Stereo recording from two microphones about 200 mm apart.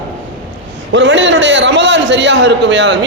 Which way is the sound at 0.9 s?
65° right (ahead or behind).